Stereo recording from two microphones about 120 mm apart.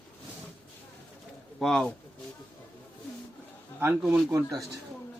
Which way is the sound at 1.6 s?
5° left (ahead or behind).